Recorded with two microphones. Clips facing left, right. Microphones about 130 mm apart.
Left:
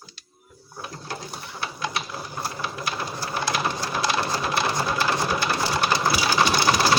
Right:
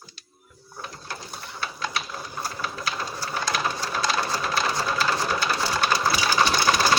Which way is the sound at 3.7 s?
15° left (ahead or behind).